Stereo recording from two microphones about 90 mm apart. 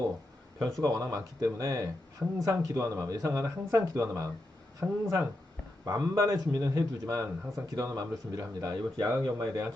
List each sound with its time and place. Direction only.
0.8 s a man's voice: 40° right (ahead or behind)
4.8 s speech: 20° right (ahead or behind)
5.8 s a man's voice: 45° right (ahead or behind)